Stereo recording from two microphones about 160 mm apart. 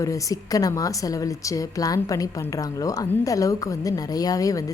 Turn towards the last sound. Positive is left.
turn(degrees=20)  # may be behind; listen again after turning